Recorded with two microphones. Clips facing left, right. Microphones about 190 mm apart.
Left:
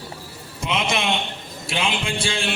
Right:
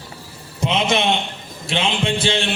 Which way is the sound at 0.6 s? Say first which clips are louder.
Right 5 dB; 25° right (ahead or behind).